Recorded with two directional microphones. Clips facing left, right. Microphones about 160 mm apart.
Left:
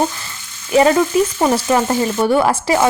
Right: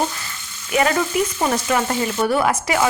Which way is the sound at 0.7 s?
30° left (ahead or behind).